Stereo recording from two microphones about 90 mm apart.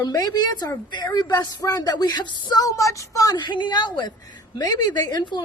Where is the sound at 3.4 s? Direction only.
55° left (ahead or behind).